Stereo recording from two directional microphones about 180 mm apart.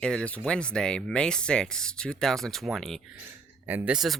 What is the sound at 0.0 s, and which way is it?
Speech, 5° left (ahead or behind).